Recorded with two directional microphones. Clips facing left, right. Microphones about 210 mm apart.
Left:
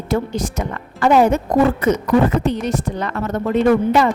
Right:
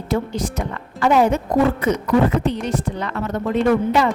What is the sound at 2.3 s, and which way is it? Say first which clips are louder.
Speech: left 2 dB; 45° left (ahead or behind).